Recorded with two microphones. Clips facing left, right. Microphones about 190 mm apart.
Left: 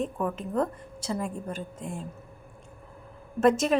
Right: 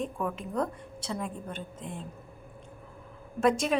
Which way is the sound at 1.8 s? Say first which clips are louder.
Left 3 dB; 45° left (ahead or behind).